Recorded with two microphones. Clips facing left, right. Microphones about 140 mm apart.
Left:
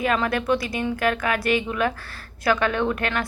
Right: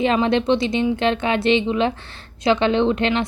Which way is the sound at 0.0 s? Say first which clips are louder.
Right 5 dB; 25° right (ahead or behind).